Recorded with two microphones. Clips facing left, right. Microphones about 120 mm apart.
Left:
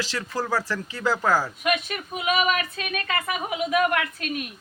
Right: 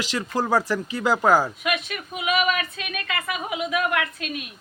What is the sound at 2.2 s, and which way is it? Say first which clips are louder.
Speech: even; 40° left (ahead or behind).